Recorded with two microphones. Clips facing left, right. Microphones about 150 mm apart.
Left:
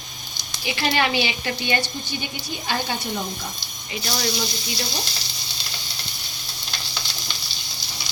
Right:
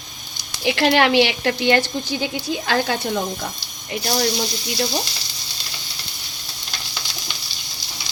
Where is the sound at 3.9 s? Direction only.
45° right (ahead or behind).